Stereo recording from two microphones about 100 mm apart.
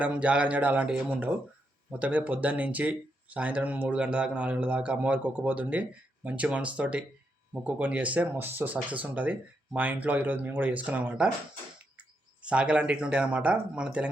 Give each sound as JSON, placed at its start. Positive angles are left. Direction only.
{"t": 0.0, "sound": "speech", "side_deg": -10}
{"t": 12.4, "sound": "speech", "side_deg": -10}